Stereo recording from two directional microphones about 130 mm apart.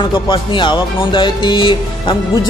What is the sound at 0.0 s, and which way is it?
Speech, 40° left (ahead or behind).